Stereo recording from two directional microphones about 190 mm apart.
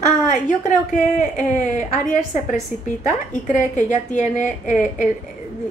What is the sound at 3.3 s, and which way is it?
A woman's voice, 40° left (ahead or behind).